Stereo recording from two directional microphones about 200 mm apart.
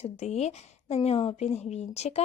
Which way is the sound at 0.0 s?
35° left (ahead or behind).